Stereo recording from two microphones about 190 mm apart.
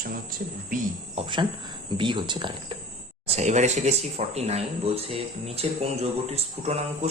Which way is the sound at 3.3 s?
35° right (ahead or behind).